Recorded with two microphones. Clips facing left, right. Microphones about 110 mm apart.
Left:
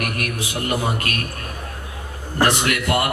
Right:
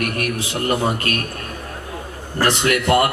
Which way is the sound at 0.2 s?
30° right (ahead or behind).